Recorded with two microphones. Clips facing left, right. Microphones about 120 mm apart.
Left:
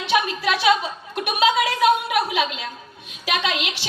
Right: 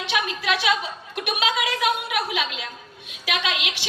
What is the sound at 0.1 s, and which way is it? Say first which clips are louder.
Speech: left 4 dB; 35° left (ahead or behind).